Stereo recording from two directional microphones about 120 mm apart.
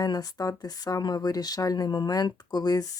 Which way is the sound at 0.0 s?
30° left (ahead or behind).